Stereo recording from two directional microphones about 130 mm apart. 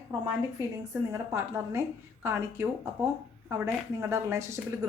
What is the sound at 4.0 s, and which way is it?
Speech, 20° right (ahead or behind).